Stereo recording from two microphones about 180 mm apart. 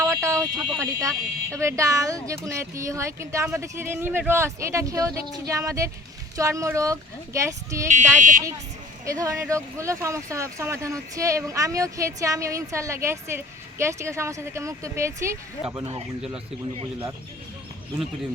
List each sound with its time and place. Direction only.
0.0 s speech: 15° right (ahead or behind)
7.9 s speech: 45° right (ahead or behind)
9.0 s speech: 20° right (ahead or behind)